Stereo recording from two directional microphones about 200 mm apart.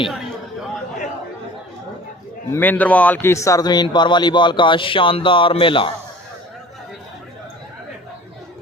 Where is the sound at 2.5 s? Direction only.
10° left (ahead or behind); by 5.9 s 25° left (ahead or behind).